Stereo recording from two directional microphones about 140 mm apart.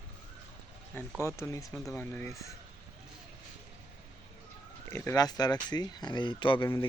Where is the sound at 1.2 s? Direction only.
20° left (ahead or behind).